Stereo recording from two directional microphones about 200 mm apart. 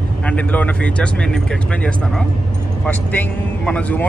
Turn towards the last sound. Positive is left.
turn(degrees=5)  # may be behind; listen again after turning